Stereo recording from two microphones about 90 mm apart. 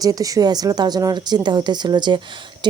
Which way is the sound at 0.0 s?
40° right (ahead or behind).